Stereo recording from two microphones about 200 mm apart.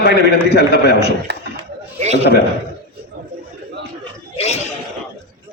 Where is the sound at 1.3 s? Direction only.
60° right (ahead or behind).